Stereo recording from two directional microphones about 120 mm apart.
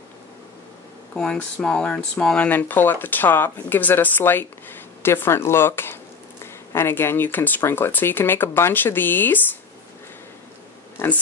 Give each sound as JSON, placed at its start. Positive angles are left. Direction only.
{"t": 1.1, "sound": "speech", "side_deg": 5}
{"t": 11.0, "sound": "speech", "side_deg": 20}